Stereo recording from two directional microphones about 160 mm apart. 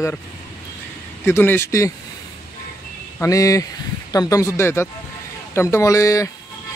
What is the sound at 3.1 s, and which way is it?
Speech, 20° left (ahead or behind).